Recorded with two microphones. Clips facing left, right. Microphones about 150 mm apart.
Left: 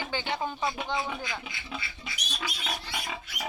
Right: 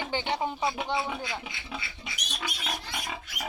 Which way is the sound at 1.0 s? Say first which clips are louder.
Right 1 dB; 10° right (ahead or behind).